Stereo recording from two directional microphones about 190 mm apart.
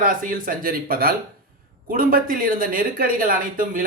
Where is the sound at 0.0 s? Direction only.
45° right (ahead or behind).